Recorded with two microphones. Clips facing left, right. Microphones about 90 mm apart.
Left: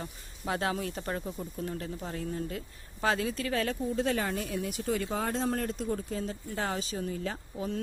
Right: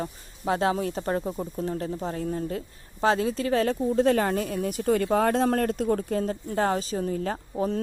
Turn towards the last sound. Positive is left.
turn(degrees=-45)  # may be behind; listen again after turning